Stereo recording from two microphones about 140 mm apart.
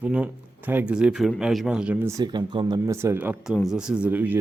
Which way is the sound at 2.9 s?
20° right (ahead or behind).